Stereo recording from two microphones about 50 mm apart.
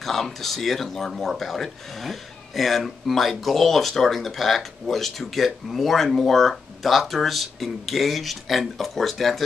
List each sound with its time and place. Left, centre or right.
0.0 s speech: centre